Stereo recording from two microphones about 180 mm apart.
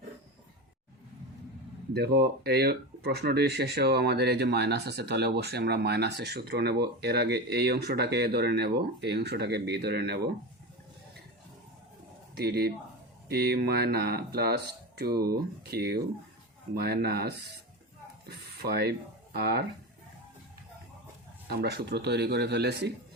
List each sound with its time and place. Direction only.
2.0 s speech: 60° right (ahead or behind)
12.4 s speech: 60° right (ahead or behind)
21.4 s speech: 60° right (ahead or behind)